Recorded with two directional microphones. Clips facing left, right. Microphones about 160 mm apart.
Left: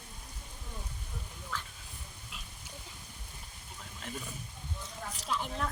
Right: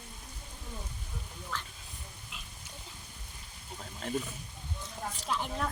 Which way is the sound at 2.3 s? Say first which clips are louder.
Even; centre (ahead or behind).